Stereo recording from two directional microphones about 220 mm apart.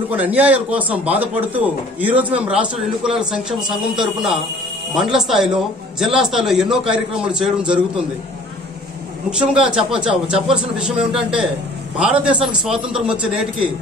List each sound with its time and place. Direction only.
0.1 s a man's voice: 5° right (ahead or behind)
9.4 s a man's voice: 5° right (ahead or behind)